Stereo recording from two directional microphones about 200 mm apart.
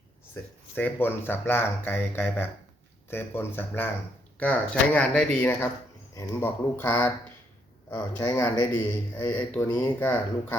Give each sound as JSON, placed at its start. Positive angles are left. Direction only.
{"t": 0.4, "sound": "speech", "side_deg": 10}